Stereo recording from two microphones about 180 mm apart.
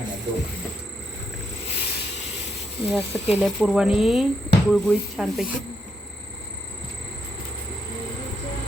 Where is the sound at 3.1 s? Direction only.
35° left (ahead or behind).